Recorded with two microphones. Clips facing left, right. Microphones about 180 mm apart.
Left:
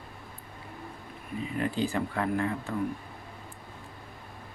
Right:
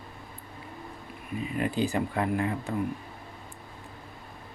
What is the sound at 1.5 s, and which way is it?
Speech, 15° right (ahead or behind).